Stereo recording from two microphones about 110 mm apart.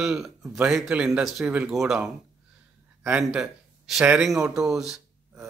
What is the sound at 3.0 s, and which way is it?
Speech, 10° right (ahead or behind).